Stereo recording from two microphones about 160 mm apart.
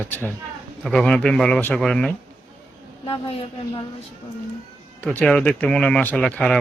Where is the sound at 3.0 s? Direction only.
35° left (ahead or behind).